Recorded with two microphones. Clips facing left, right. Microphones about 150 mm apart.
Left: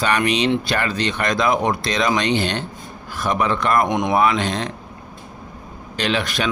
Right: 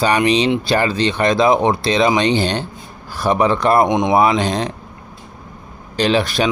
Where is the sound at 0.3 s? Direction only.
30° right (ahead or behind).